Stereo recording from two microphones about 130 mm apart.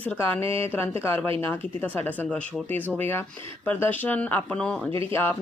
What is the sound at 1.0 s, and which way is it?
Speech, 15° left (ahead or behind).